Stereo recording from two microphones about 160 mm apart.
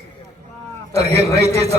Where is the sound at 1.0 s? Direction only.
40° right (ahead or behind).